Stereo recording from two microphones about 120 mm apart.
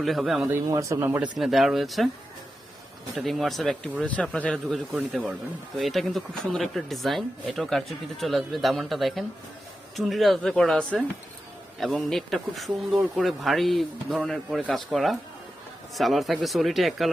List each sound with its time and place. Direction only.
0.0 s speech: centre (ahead or behind)
0.5 s speech: 25° right (ahead or behind)
1.4 s speech: centre (ahead or behind)
3.2 s speech: centre (ahead or behind)